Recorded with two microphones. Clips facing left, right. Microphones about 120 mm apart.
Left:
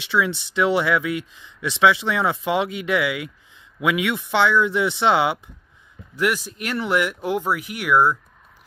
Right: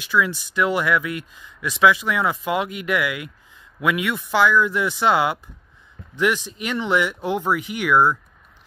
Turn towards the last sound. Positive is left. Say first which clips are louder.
# right 1 dB
turn(degrees=10)  # may be behind; listen again after turning